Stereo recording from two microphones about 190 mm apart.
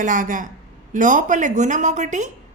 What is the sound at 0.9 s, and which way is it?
Music, 45° right (ahead or behind).